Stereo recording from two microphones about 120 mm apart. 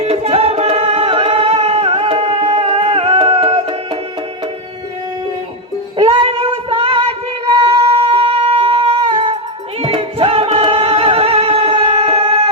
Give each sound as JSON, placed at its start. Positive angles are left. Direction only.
{"t": 0.0, "sound": "music", "side_deg": -60}
{"t": 6.0, "sound": "a sound", "side_deg": -50}
{"t": 9.8, "sound": "music", "side_deg": -50}